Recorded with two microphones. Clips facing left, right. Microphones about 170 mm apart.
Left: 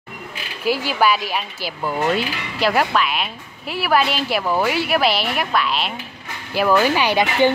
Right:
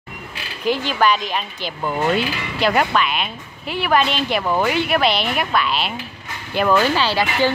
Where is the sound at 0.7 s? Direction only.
5° left (ahead or behind).